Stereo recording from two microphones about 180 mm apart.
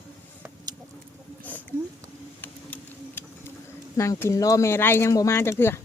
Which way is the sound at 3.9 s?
15° left (ahead or behind).